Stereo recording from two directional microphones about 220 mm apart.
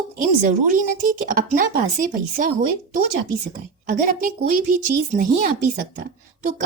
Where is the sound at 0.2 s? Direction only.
35° right (ahead or behind).